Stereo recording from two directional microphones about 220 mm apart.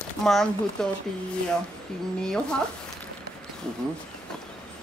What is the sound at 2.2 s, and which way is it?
Speech, 5° left (ahead or behind).